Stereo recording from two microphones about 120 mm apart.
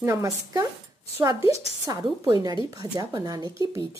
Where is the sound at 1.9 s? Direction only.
30° right (ahead or behind).